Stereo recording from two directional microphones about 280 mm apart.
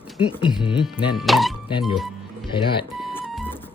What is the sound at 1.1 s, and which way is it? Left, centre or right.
Speech, centre.